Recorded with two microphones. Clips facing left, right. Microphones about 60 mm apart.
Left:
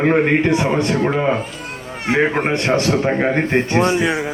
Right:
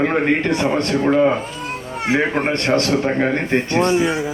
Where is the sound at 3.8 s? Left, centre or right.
Left.